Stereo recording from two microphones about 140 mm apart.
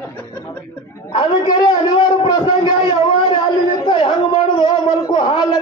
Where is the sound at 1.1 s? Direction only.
30° left (ahead or behind).